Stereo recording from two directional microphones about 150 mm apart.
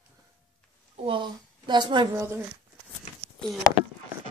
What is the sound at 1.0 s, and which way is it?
A woman's voice, 35° right (ahead or behind).